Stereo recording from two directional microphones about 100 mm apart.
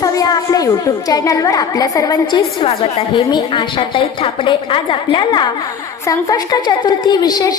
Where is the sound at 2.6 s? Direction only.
65° left (ahead or behind).